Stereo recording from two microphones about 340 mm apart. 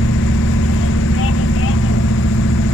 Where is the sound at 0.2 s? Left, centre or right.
Left.